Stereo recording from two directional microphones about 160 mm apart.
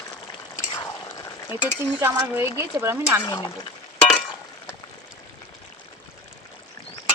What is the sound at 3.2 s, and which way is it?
Speech, 25° left (ahead or behind).